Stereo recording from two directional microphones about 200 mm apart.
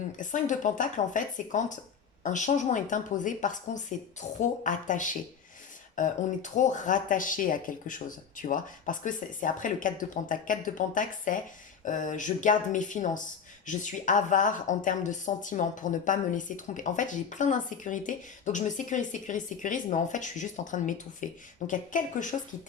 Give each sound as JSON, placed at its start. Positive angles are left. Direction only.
{"t": 0.2, "sound": "speech", "side_deg": 40}